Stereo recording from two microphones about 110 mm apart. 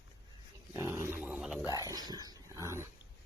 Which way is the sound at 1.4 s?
5° right (ahead or behind).